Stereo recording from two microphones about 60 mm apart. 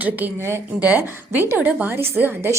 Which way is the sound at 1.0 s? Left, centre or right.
Right.